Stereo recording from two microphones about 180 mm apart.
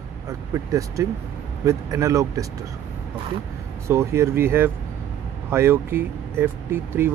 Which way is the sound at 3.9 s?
15° right (ahead or behind).